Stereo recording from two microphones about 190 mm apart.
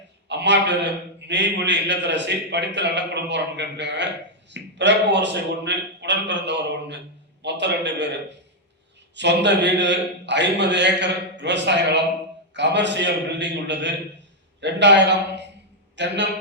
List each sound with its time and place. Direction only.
0.3 s a man's voice: 65° right (ahead or behind)
9.1 s a man's voice: 65° right (ahead or behind)